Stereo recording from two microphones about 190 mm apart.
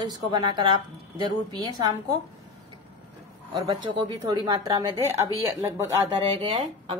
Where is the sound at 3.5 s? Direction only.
25° right (ahead or behind).